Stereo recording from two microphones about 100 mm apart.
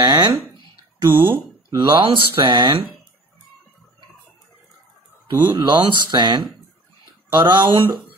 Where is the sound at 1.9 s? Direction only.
60° right (ahead or behind).